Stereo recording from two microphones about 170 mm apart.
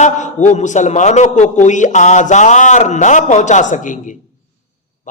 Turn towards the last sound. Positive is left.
turn(degrees=50)  # may be behind; listen again after turning